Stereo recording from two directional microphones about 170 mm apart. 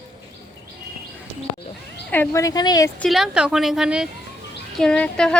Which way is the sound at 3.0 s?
Centre (ahead or behind).